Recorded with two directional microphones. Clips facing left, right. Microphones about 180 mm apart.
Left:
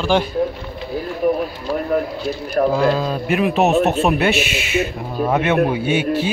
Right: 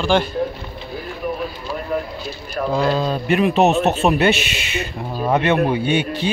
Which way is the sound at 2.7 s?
5° left (ahead or behind).